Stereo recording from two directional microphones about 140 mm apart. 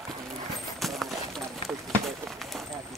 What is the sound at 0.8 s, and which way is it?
Clip-clop, centre (ahead or behind).